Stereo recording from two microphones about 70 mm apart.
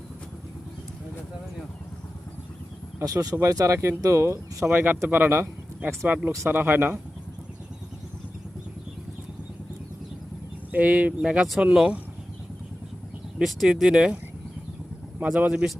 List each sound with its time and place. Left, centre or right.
3.0 s speech: right
10.7 s speech: right
11.2 s speech: centre
13.4 s speech: centre
13.7 s speech: centre
15.2 s speech: centre